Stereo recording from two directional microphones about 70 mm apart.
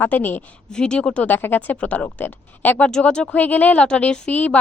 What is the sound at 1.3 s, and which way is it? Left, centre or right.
Speech, left.